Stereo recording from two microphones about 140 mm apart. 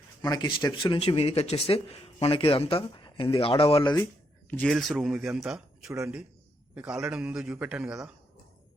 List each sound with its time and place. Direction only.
0.2 s speech: 30° left (ahead or behind)
4.4 s speech: 10° left (ahead or behind)
4.7 s a man's voice: centre (ahead or behind)